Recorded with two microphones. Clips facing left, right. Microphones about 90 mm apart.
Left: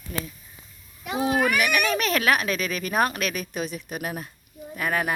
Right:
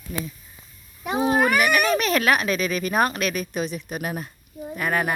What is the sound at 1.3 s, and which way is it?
Speech, 40° right (ahead or behind).